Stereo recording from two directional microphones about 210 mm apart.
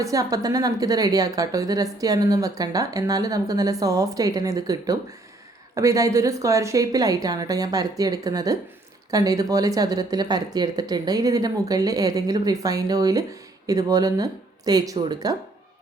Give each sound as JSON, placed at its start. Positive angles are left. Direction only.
{"t": 0.0, "sound": "a woman's voice", "side_deg": -15}